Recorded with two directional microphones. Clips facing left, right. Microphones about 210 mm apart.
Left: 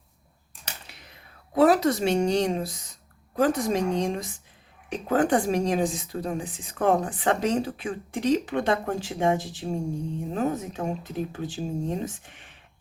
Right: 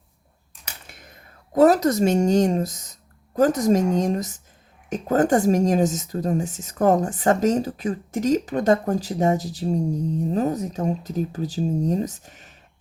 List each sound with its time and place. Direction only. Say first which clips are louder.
0.9 s a woman's voice: right 3 dB; 50° right (ahead or behind)